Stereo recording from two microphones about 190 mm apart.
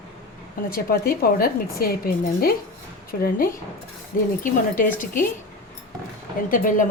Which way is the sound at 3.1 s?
50° left (ahead or behind).